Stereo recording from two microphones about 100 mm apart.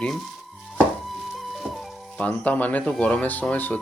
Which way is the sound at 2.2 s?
15° left (ahead or behind).